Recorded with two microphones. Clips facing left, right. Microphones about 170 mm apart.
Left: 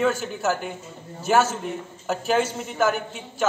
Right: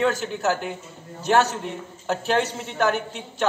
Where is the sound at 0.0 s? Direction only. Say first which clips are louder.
Even; centre (ahead or behind).